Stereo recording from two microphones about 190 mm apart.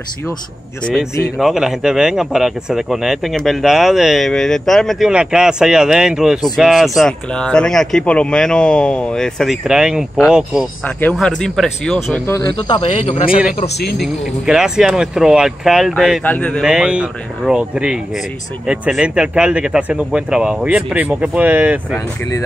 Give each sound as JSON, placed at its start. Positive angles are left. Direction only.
{"t": 1.4, "sound": "speech", "side_deg": -5}
{"t": 12.5, "sound": "speech", "side_deg": 30}
{"t": 13.9, "sound": "speech", "side_deg": 0}